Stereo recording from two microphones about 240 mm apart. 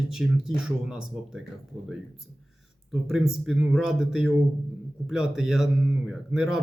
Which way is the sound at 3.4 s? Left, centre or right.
Centre.